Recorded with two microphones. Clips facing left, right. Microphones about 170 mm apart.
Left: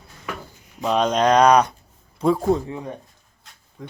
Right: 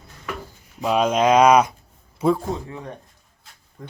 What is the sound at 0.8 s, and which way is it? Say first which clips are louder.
A man's voice: even; 5° right (ahead or behind).